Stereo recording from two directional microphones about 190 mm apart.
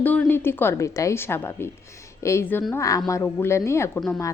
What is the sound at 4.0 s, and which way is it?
Speech, centre (ahead or behind).